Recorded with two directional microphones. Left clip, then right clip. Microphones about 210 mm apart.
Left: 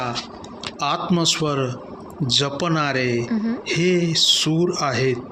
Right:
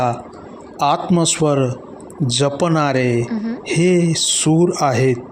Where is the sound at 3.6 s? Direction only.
25° right (ahead or behind).